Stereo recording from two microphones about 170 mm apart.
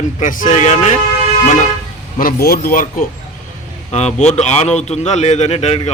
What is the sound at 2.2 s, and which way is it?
Speech, 60° left (ahead or behind).